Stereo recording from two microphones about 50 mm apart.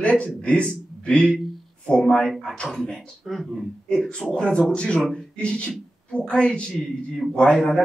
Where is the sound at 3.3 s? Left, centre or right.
Centre.